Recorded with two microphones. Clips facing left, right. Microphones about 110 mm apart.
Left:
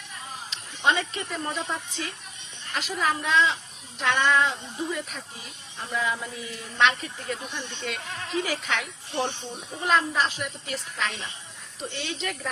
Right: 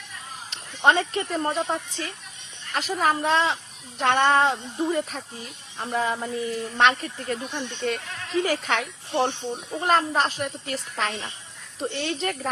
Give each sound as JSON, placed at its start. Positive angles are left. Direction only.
{"t": 0.5, "sound": "speech", "side_deg": -50}